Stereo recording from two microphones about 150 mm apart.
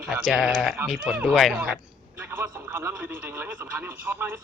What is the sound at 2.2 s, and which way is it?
Speech, 15° right (ahead or behind).